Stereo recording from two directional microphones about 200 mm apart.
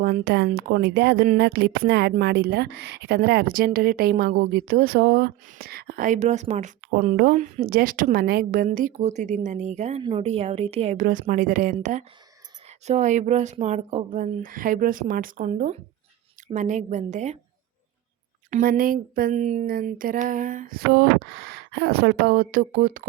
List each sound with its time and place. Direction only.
0.0 s speech: 50° right (ahead or behind)
18.5 s speech: 45° right (ahead or behind)